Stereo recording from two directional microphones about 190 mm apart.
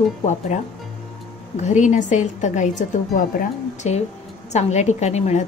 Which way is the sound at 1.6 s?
40° left (ahead or behind).